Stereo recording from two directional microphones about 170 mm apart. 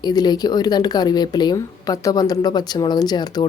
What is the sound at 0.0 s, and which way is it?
Speech, 25° left (ahead or behind).